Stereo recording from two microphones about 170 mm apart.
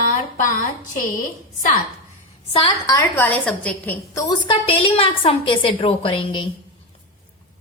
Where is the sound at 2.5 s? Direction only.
30° left (ahead or behind).